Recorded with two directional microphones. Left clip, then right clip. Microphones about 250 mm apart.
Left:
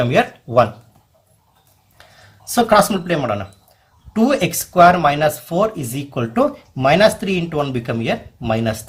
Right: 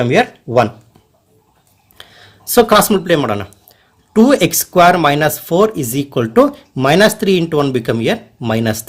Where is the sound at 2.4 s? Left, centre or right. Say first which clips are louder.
Right 3 dB; right.